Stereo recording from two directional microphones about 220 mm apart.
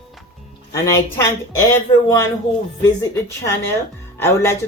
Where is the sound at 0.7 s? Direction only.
15° left (ahead or behind).